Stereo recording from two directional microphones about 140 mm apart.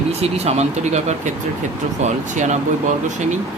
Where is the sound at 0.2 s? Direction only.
50° right (ahead or behind).